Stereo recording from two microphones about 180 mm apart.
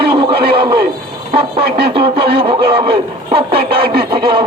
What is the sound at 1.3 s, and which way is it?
A man's voice, 30° right (ahead or behind).